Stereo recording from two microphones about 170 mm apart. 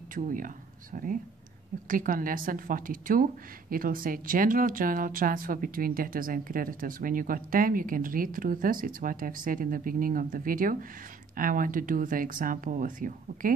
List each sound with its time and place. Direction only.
0.1 s speech: 50° right (ahead or behind)